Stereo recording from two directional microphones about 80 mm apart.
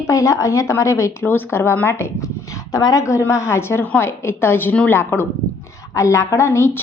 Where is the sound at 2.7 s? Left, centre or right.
Left.